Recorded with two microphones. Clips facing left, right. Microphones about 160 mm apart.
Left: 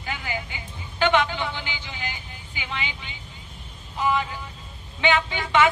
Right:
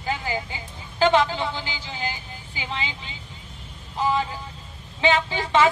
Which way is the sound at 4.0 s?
35° right (ahead or behind).